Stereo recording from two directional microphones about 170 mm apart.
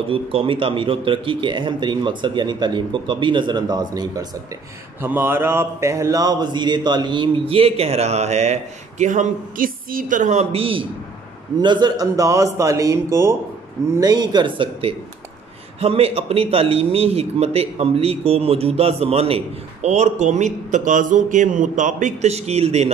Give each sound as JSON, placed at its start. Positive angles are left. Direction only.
{"t": 0.1, "sound": "a man's voice", "side_deg": -35}
{"t": 5.0, "sound": "a man's voice", "side_deg": -10}